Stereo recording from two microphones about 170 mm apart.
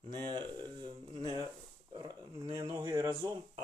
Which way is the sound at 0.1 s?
25° right (ahead or behind).